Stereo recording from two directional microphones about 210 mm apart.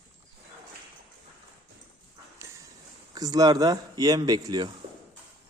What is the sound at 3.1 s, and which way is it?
Speech, 20° right (ahead or behind).